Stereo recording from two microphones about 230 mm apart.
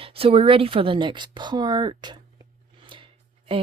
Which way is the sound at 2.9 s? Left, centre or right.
Right.